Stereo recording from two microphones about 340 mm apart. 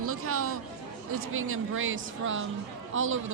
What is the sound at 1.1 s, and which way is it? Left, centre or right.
A woman's voice, right.